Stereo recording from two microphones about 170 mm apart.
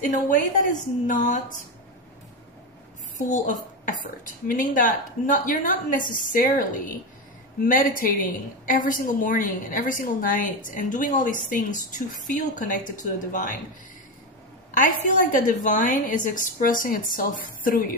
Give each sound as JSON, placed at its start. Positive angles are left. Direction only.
{"t": 0.3, "sound": "a woman's voice", "side_deg": 50}
{"t": 3.3, "sound": "a woman's voice", "side_deg": 50}
{"t": 14.7, "sound": "a woman's voice", "side_deg": 50}